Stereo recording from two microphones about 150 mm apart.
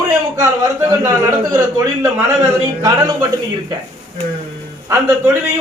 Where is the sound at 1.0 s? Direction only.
25° right (ahead or behind).